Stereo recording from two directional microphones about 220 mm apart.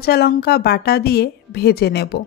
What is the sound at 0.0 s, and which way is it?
A woman's voice, 45° left (ahead or behind).